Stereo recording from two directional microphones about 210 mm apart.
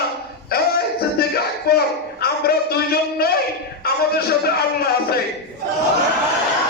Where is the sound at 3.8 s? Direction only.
50° left (ahead or behind).